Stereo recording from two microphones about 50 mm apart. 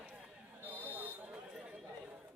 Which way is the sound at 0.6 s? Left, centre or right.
Right.